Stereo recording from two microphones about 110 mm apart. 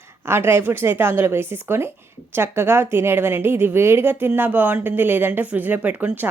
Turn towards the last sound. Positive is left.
turn(degrees=-15)  # may be behind; listen again after turning